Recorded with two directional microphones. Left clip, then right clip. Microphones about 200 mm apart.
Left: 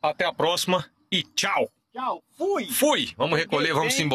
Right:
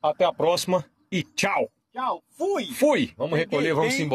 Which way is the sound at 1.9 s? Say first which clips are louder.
Right 1 dB; 30° right (ahead or behind).